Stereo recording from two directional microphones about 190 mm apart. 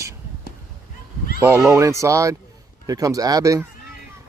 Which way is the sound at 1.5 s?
15° right (ahead or behind).